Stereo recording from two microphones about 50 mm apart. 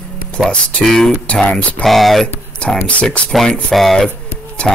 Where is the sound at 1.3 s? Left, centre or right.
Left.